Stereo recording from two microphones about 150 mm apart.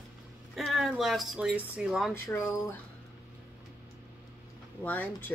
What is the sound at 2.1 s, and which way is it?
Speech, 20° left (ahead or behind).